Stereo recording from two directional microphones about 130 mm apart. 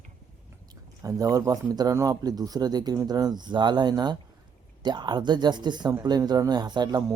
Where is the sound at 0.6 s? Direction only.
30° right (ahead or behind).